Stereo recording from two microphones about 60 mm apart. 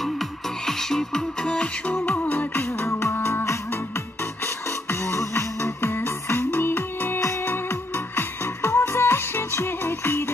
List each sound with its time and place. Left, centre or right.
0.7 s music: centre
1.9 s music: left
2.3 s music: left
4.8 s music: left
7.2 s music: left